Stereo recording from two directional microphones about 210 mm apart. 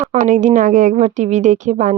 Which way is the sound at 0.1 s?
35° right (ahead or behind).